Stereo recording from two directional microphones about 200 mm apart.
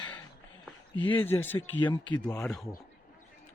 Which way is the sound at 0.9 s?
25° left (ahead or behind).